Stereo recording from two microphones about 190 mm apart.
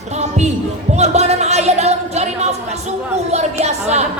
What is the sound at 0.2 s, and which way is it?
Music, 35° right (ahead or behind).